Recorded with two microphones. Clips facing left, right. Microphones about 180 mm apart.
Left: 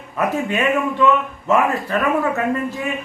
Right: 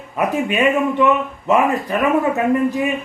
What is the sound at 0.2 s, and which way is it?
Speech, 15° right (ahead or behind).